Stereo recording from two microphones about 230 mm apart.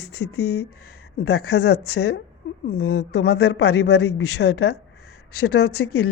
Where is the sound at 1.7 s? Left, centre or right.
Left.